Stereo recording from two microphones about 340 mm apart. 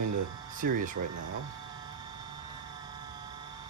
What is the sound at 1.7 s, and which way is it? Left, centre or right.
Vehicle, centre.